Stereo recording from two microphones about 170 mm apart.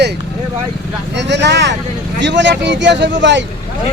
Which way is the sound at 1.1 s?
90° right.